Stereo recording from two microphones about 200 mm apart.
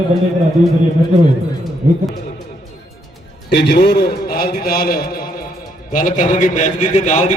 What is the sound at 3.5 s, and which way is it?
A man's voice, 55° left (ahead or behind).